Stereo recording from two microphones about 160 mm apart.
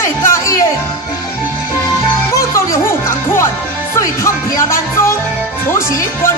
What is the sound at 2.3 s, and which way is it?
Music, 20° left (ahead or behind).